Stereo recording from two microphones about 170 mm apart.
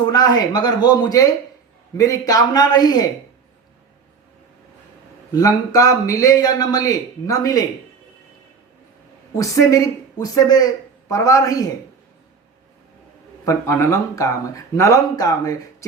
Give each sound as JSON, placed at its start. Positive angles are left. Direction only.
{"t": 0.0, "sound": "a man's voice", "side_deg": 25}
{"t": 5.3, "sound": "a man's voice", "side_deg": 20}
{"t": 9.3, "sound": "a man's voice", "side_deg": 15}
{"t": 13.4, "sound": "a man's voice", "side_deg": 15}